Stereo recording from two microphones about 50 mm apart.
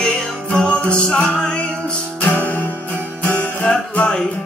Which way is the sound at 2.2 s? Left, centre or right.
Left.